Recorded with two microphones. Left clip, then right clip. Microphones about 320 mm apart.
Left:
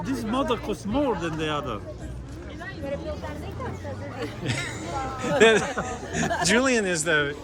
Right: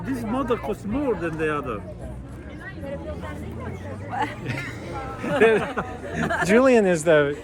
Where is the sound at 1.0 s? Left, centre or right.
Centre.